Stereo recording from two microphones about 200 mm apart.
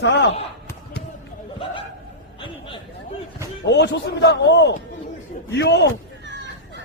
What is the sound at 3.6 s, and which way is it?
A man's voice, 60° left (ahead or behind).